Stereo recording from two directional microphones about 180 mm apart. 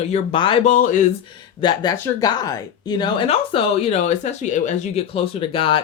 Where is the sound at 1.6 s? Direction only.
25° left (ahead or behind); by 5.0 s 40° left (ahead or behind).